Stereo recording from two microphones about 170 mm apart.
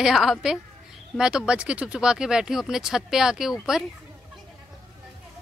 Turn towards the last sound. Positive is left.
turn(degrees=0)  # may be behind; listen again after turning